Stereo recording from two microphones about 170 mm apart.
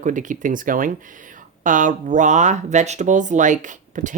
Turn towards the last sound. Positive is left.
turn(degrees=-45)  # may be behind; listen again after turning